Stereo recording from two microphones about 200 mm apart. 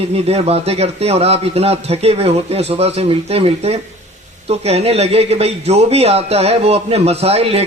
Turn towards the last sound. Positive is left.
turn(degrees=-30)  # may be behind; listen again after turning